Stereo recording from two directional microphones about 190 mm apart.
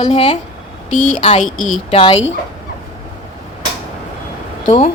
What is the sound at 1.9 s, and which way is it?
Speech, 30° left (ahead or behind).